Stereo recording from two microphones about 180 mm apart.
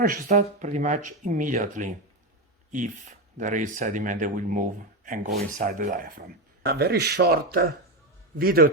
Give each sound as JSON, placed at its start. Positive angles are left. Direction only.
{"t": 0.0, "sound": "speech", "side_deg": -45}